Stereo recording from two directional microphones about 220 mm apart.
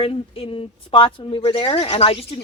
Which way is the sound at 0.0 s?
25° left (ahead or behind).